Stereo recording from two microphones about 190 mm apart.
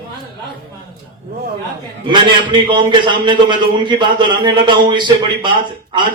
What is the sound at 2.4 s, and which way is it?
A man's voice, 25° right (ahead or behind).